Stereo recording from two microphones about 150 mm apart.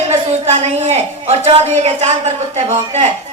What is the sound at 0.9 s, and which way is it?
A woman's voice, 45° right (ahead or behind).